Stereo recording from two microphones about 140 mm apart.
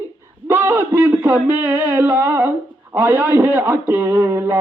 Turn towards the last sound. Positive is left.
turn(degrees=-15)  # may be behind; listen again after turning